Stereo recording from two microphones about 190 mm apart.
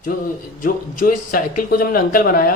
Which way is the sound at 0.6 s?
45° left (ahead or behind).